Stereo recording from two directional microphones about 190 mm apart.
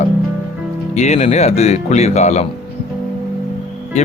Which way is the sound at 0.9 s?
35° left (ahead or behind).